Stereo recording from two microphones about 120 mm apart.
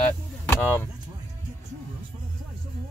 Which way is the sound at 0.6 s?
15° left (ahead or behind).